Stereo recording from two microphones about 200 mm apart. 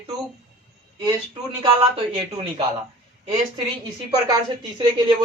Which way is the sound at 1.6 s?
30° right (ahead or behind).